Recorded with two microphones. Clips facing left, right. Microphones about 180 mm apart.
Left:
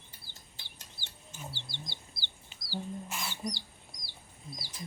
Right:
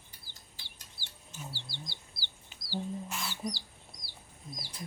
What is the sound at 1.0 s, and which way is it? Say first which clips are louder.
Chicken: even; 15° left (ahead or behind).